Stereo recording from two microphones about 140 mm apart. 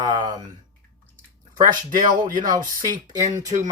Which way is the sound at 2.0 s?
75° right (ahead or behind).